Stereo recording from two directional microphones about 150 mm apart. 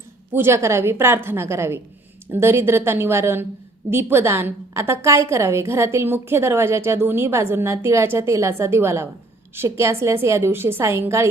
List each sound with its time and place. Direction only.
0.3 s a woman's voice: 15° right (ahead or behind)